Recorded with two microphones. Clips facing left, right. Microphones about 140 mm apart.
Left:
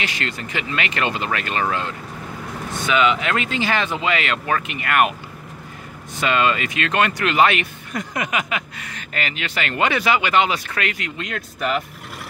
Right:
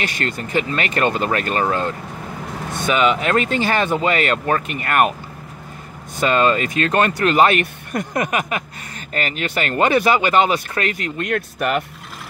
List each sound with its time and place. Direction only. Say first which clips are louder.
0.0 s speech: right 3 dB; 45° right (ahead or behind)
2.9 s speech: right 2 dB; 40° right (ahead or behind)
6.1 s speech: right 3 dB; 40° right (ahead or behind); by 11.8 s 55° right (ahead or behind)